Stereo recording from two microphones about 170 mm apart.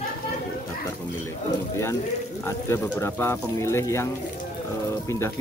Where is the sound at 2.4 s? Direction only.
10° left (ahead or behind).